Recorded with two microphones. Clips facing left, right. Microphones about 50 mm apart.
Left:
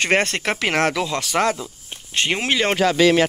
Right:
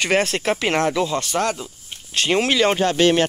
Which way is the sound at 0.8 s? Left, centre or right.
Left.